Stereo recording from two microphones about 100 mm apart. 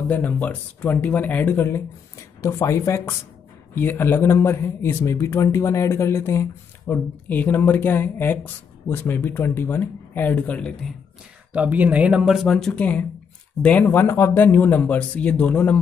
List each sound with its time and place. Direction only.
0.1 s speech: 15° left (ahead or behind)
3.7 s speech: 20° left (ahead or behind)
6.9 s speech: 15° left (ahead or behind)
11.5 s speech: 15° right (ahead or behind); by 12.8 s 5° left (ahead or behind)
13.6 s speech: 15° left (ahead or behind)